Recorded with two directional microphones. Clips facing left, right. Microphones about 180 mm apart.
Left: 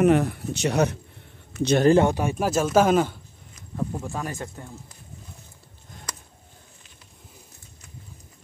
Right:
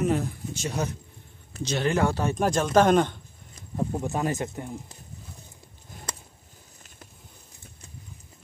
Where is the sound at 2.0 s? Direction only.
15° left (ahead or behind).